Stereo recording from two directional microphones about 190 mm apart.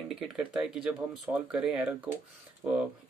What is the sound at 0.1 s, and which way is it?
Speech, 5° right (ahead or behind).